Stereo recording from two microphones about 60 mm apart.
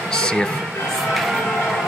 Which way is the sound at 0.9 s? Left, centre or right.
Centre.